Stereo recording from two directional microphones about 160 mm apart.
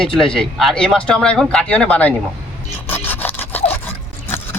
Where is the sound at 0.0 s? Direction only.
5° left (ahead or behind).